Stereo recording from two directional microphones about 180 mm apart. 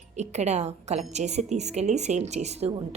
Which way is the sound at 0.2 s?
40° right (ahead or behind).